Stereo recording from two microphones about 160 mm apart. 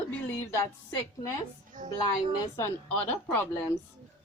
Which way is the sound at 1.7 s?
55° right (ahead or behind).